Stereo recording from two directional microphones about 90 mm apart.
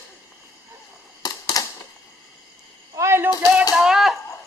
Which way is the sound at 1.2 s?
50° left (ahead or behind).